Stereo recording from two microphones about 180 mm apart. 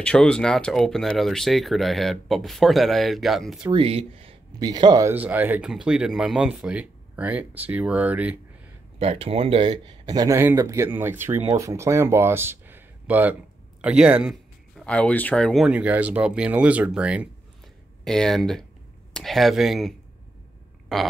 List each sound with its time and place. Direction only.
0.0 s speech: 5° left (ahead or behind)
3.7 s speech: 30° right (ahead or behind); by 8.4 s 10° right (ahead or behind)
9.0 s speech: 35° right (ahead or behind); by 14.3 s 5° right (ahead or behind)
14.8 s speech: 5° left (ahead or behind)
20.9 s a sound: centre (ahead or behind)